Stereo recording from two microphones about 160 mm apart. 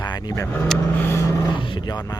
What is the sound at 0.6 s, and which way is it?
Speech, 5° left (ahead or behind).